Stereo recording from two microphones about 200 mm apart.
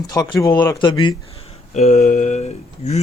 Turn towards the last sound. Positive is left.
turn(degrees=35)  # may be behind; listen again after turning